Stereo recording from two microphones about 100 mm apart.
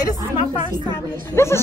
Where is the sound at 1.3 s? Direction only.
25° left (ahead or behind).